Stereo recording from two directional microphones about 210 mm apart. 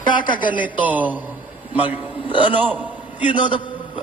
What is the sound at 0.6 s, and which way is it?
A man's voice, 5° right (ahead or behind).